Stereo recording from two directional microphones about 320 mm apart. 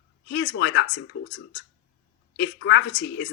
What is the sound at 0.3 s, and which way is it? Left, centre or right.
Speech, left.